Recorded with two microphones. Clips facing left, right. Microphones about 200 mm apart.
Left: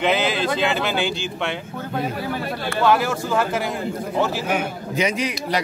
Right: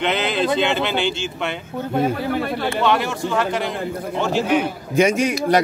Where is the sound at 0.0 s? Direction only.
Centre (ahead or behind).